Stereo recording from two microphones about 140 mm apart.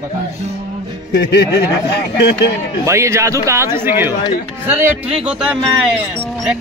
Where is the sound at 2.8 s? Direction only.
20° right (ahead or behind).